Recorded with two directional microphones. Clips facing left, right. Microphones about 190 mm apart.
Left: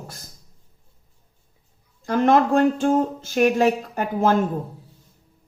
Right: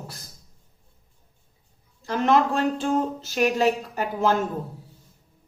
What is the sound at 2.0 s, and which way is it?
Speech, 50° left (ahead or behind).